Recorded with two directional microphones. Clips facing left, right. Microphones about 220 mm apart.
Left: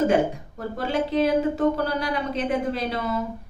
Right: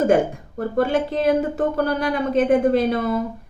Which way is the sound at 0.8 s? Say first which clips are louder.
Right 3 dB; 50° right (ahead or behind).